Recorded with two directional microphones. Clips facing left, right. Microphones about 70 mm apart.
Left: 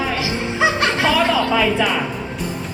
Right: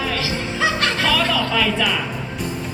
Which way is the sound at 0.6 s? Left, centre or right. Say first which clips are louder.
Left 3 dB; centre.